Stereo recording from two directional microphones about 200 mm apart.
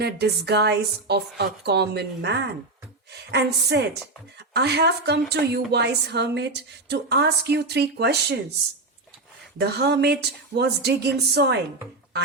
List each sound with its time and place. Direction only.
0.0 s a woman's voice: 55° right (ahead or behind)
9.6 s a woman's voice: 55° right (ahead or behind)